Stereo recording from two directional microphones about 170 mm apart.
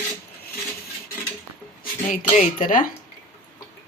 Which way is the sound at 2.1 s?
50° left (ahead or behind).